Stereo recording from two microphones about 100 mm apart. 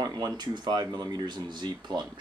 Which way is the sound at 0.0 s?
40° right (ahead or behind).